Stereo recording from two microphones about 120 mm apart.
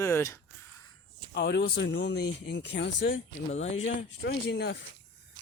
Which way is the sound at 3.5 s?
65° left (ahead or behind).